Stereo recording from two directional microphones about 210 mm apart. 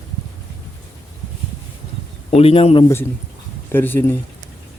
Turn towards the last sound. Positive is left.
turn(degrees=10)  # may be behind; listen again after turning